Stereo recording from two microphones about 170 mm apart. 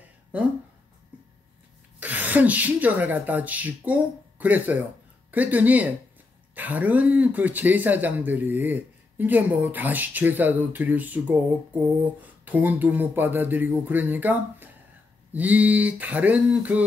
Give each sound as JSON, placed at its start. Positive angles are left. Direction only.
{"t": 2.0, "sound": "speech", "side_deg": -10}